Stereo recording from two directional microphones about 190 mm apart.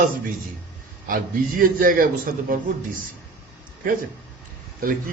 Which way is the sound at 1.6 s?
45° right (ahead or behind).